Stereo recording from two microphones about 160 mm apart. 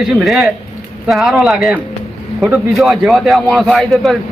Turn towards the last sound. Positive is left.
turn(degrees=0)  # may be behind; listen again after turning